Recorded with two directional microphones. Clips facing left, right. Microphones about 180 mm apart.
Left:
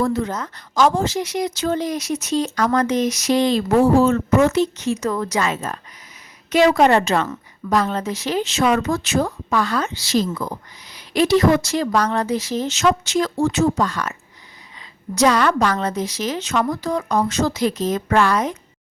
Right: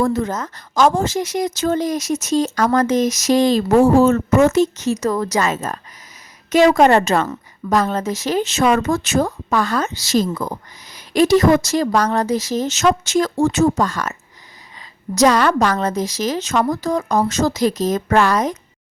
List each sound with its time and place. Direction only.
0.0 s speech: 45° right (ahead or behind)